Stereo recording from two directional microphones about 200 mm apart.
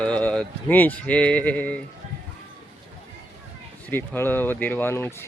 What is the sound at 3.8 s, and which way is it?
Speech, 10° left (ahead or behind).